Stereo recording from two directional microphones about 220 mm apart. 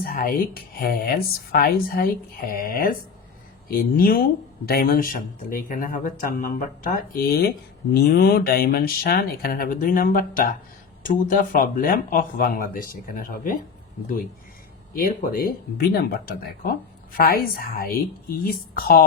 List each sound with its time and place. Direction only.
0.0 s speech: 40° left (ahead or behind)
14.9 s speech: 40° left (ahead or behind)